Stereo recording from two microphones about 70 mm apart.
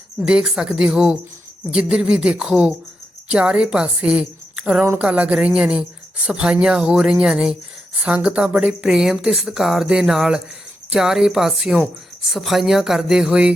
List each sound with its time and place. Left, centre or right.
0.3 s speech: centre